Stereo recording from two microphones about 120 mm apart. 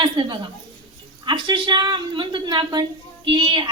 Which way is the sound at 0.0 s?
40° right (ahead or behind).